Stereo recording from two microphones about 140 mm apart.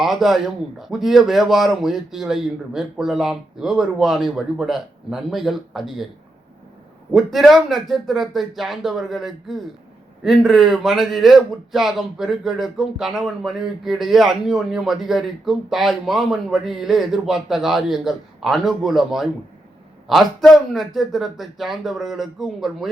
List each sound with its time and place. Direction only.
0.0 s a man's voice: centre (ahead or behind)
7.1 s a man's voice: centre (ahead or behind)